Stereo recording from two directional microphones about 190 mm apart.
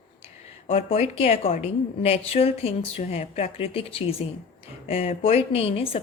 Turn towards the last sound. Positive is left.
turn(degrees=30)  # may be behind; listen again after turning